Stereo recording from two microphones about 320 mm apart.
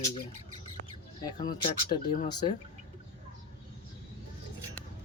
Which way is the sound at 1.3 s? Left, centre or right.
Centre.